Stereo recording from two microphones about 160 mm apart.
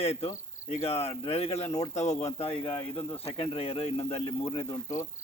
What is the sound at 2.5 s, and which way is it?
Speech, 15° left (ahead or behind).